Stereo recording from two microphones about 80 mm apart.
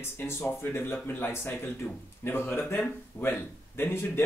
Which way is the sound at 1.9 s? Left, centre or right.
Centre.